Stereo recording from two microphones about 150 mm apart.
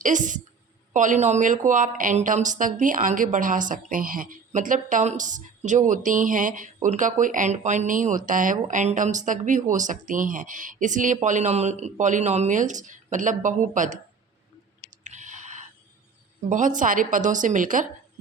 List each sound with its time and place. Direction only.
0.0 s speech: 60° right (ahead or behind)
15.0 s a sound: 55° right (ahead or behind)
16.5 s speech: 60° right (ahead or behind)